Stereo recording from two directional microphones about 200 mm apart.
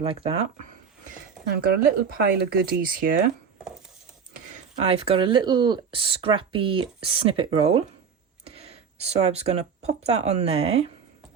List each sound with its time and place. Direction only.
0.0 s speech: 30° right (ahead or behind)
1.5 s speech: 50° right (ahead or behind)
4.8 s speech: 30° right (ahead or behind)